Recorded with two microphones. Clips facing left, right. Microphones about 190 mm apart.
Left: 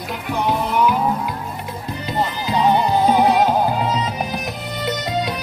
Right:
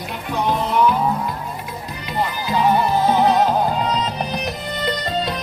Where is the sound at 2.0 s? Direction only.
20° left (ahead or behind).